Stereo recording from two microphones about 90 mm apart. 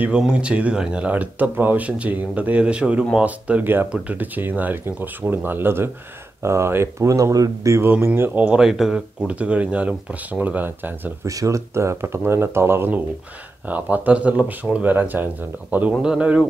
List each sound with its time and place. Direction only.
0.2 s speech: 10° right (ahead or behind); by 7.9 s 35° right (ahead or behind)
7.9 s speech: 20° right (ahead or behind)
8.5 s speech: 5° right (ahead or behind)
9.3 s speech: 15° right (ahead or behind)
11.2 s speech: 35° right (ahead or behind); by 16.4 s 10° right (ahead or behind)